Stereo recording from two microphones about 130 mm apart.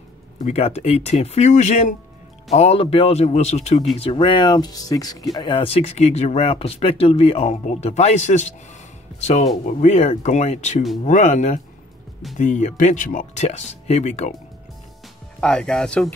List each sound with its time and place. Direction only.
0.4 s speech: 55° left (ahead or behind)
2.5 s speech: 50° left (ahead or behind)
3.9 s speech: 45° left (ahead or behind); by 5.2 s 30° left (ahead or behind)
5.3 s speech: 40° left (ahead or behind); by 14.3 s 60° left (ahead or behind)
15.4 s speech: 5° left (ahead or behind)